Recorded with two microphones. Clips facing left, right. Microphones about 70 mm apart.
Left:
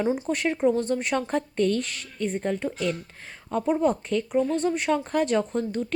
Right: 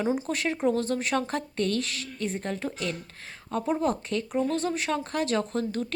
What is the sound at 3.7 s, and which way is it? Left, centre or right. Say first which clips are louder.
Speech: left 4 dB; centre.